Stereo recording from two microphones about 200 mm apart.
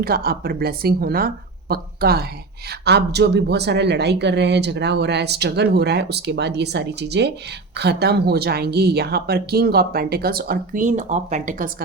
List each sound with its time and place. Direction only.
0.0 s a woman's voice: 50° right (ahead or behind)